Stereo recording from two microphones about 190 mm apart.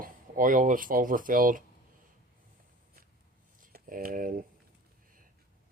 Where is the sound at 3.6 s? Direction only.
45° right (ahead or behind).